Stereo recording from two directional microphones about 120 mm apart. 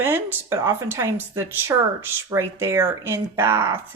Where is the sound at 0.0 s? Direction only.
20° right (ahead or behind).